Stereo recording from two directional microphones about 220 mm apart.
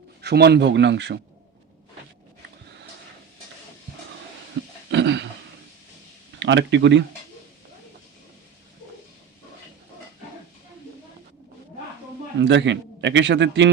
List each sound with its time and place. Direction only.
0.2 s a man's voice: 50° right (ahead or behind)
4.9 s throat clearing: 55° right (ahead or behind)
6.4 s speech: 55° right (ahead or behind)
12.4 s a man's voice: 55° right (ahead or behind)